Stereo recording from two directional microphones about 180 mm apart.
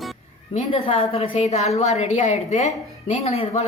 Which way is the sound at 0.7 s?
35° left (ahead or behind).